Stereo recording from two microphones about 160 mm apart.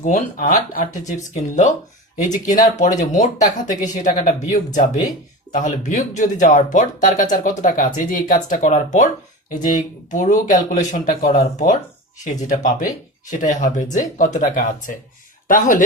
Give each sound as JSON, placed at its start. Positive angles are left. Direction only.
{"t": 0.0, "sound": "speech", "side_deg": 50}
{"t": 1.0, "sound": "speech", "side_deg": 50}